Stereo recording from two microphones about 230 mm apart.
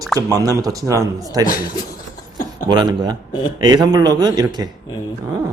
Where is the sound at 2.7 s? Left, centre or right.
Centre.